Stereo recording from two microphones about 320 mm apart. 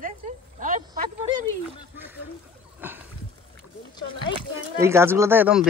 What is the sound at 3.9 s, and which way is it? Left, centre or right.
Speech, centre.